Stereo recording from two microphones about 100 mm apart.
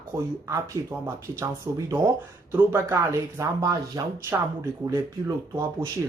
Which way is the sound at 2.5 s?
20° right (ahead or behind).